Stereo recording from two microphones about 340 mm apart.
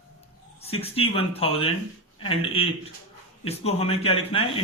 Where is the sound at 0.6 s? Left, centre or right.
Centre.